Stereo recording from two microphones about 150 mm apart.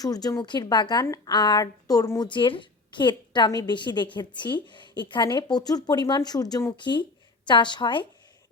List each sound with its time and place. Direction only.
0.0 s a woman's voice: 25° left (ahead or behind)